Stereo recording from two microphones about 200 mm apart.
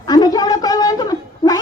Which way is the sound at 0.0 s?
20° left (ahead or behind).